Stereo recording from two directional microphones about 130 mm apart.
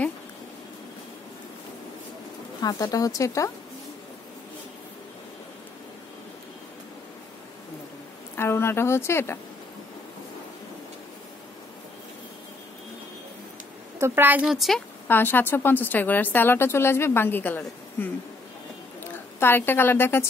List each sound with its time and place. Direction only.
2.6 s speech: 30° left (ahead or behind)
8.4 s speech: 20° left (ahead or behind)
13.9 s a woman's voice: 20° right (ahead or behind)
15.0 s speech: 15° left (ahead or behind)
19.4 s speech: 15° left (ahead or behind)